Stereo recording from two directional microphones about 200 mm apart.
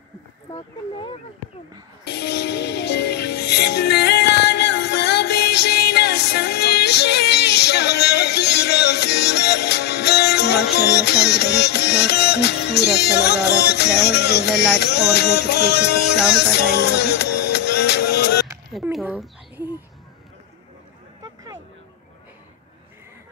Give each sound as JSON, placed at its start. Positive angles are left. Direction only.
{"t": 0.5, "sound": "speech", "side_deg": 25}
{"t": 2.0, "sound": "music", "side_deg": 55}
{"t": 18.7, "sound": "speech", "side_deg": 0}